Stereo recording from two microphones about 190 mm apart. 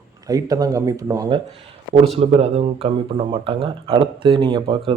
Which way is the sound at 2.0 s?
35° right (ahead or behind).